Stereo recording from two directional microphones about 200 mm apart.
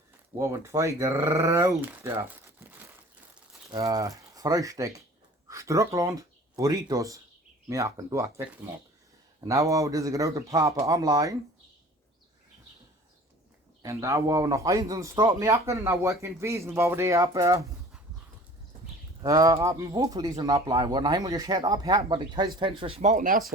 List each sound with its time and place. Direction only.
0.3 s speech: 15° right (ahead or behind)
3.7 s speech: 20° right (ahead or behind)
9.5 s speech: 15° right (ahead or behind)
13.8 s speech: 15° right (ahead or behind)
19.2 s speech: 15° right (ahead or behind); by 23.4 s 40° right (ahead or behind)